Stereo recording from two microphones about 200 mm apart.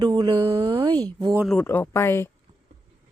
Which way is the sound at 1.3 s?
Centre (ahead or behind).